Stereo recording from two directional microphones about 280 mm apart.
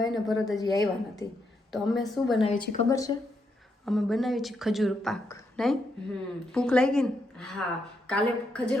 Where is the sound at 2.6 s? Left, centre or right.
Left.